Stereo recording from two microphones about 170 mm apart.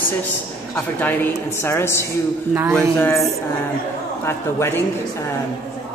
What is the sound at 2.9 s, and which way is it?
Speech, 15° left (ahead or behind).